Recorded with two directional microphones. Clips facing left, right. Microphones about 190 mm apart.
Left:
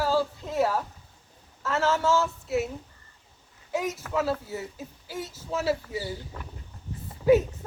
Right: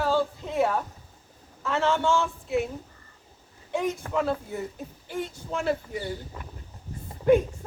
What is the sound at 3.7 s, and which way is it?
Speech, 5° left (ahead or behind).